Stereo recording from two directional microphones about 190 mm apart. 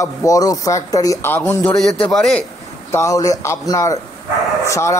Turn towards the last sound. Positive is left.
turn(degrees=15)  # may be behind; listen again after turning